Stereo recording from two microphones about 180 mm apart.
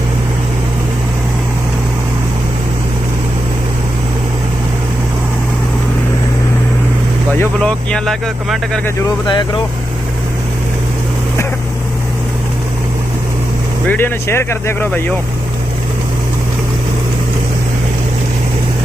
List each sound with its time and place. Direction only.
7.3 s speech: 5° left (ahead or behind)
9.2 s speech: 25° left (ahead or behind)
13.8 s speech: 10° left (ahead or behind)